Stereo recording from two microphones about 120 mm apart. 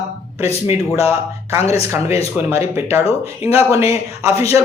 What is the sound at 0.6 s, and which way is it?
Speech, 55° left (ahead or behind).